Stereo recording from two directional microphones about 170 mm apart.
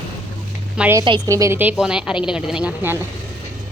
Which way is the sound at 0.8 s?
15° right (ahead or behind).